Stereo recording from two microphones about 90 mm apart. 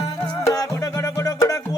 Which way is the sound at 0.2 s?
40° left (ahead or behind).